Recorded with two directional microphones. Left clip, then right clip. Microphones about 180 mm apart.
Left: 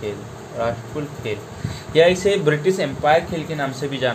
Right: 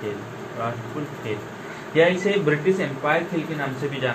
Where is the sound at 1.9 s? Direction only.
90° left.